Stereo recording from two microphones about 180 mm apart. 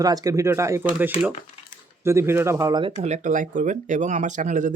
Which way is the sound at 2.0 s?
15° right (ahead or behind).